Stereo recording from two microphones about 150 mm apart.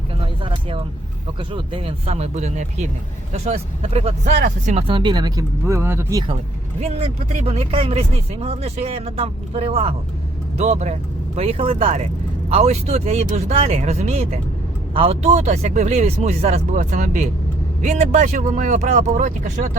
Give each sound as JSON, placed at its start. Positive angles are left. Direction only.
{"t": 0.2, "sound": "a sound", "side_deg": -35}
{"t": 1.4, "sound": "speech", "side_deg": -35}
{"t": 4.4, "sound": "speech", "side_deg": -60}
{"t": 4.8, "sound": "speech", "side_deg": -35}
{"t": 7.3, "sound": "speech", "side_deg": -45}
{"t": 16.7, "sound": "speech", "side_deg": -55}